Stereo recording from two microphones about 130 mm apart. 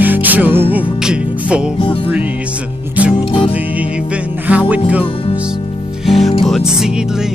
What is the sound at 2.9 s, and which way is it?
Music, 10° right (ahead or behind).